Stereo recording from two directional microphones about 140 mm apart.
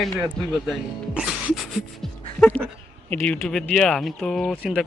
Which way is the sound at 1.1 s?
5° right (ahead or behind).